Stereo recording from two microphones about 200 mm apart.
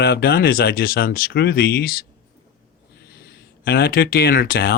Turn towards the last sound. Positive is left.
turn(degrees=50)  # may be behind; listen again after turning